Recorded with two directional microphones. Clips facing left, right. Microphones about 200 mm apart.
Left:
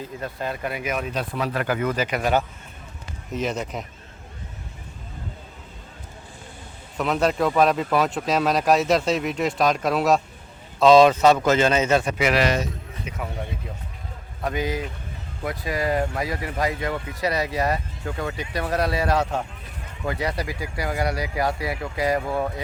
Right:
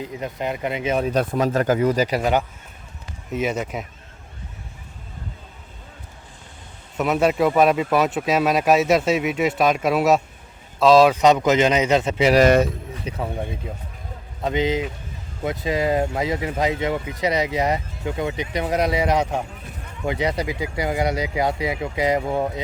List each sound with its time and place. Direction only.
0.0 s speech: 15° right (ahead or behind)
1.1 s speech: 45° right (ahead or behind)
3.3 s speech: 5° right (ahead or behind)
7.0 s speech: 5° right (ahead or behind)
11.2 s a man's voice: 15° right (ahead or behind)
12.3 s a man's voice: 45° right (ahead or behind)
13.1 s speech: 35° right (ahead or behind)
14.4 s speech: 20° right (ahead or behind)